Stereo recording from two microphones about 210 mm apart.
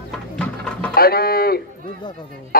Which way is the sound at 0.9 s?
45° left (ahead or behind).